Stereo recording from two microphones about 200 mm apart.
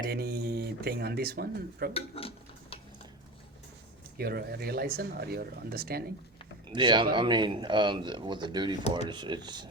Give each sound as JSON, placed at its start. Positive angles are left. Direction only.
{"t": 0.1, "sound": "speech", "side_deg": -55}
{"t": 1.9, "sound": "speech", "side_deg": 30}
{"t": 4.2, "sound": "speech", "side_deg": -50}
{"t": 6.7, "sound": "speech", "side_deg": -25}